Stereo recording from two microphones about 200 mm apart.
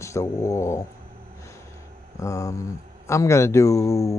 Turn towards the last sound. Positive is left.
turn(degrees=15)  # may be behind; listen again after turning